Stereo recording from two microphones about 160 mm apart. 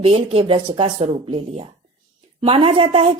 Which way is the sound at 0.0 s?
35° right (ahead or behind).